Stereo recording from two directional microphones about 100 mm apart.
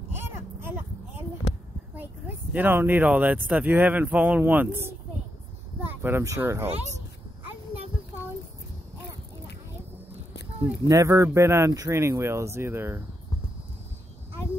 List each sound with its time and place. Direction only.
2.0 s speech: 20° right (ahead or behind)
6.0 s speech: 25° right (ahead or behind)
10.9 s speech: 30° right (ahead or behind)